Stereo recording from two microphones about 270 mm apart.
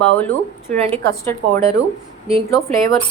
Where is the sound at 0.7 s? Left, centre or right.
Right.